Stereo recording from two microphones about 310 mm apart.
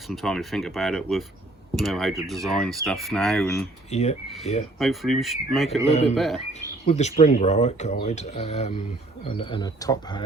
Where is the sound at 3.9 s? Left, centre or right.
Left.